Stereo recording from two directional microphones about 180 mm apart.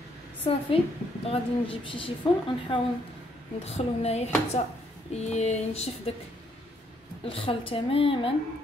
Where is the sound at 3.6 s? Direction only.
35° left (ahead or behind).